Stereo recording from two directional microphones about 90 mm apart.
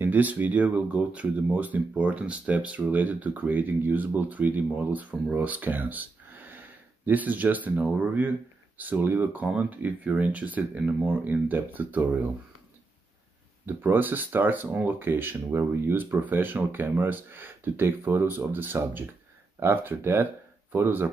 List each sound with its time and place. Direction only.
0.0 s speech: 20° right (ahead or behind)
13.7 s speech: 20° right (ahead or behind)